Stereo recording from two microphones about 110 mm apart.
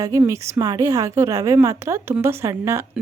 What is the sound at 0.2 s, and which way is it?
A woman's voice, 25° right (ahead or behind).